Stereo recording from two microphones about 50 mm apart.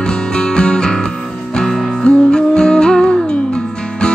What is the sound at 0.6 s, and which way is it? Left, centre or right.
Music, centre.